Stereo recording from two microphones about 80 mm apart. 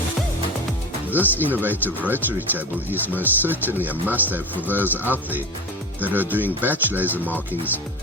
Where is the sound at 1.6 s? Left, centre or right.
Right.